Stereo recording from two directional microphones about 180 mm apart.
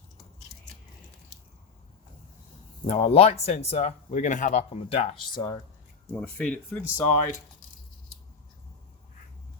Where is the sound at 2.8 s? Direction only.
35° left (ahead or behind).